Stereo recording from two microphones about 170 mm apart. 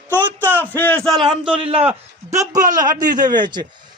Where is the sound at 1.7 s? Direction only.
35° right (ahead or behind).